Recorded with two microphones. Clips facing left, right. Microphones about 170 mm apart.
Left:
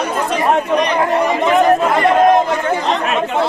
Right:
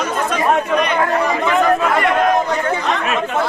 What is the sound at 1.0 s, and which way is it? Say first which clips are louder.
Speech: left 2 dB; 20° left (ahead or behind).